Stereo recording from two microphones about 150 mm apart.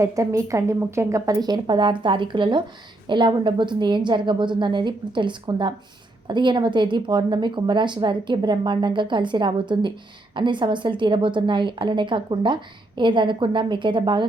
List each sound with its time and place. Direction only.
0.0 s a woman's voice: 20° right (ahead or behind)